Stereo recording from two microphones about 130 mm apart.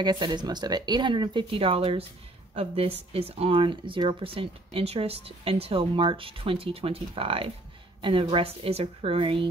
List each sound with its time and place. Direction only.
0.0 s speech: 35° right (ahead or behind)